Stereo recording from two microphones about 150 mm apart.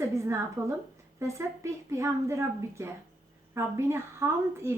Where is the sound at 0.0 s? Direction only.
20° right (ahead or behind).